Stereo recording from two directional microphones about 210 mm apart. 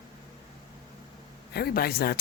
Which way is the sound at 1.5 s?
45° left (ahead or behind).